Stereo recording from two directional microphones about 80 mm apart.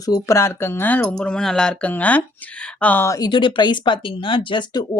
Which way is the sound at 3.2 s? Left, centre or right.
Left.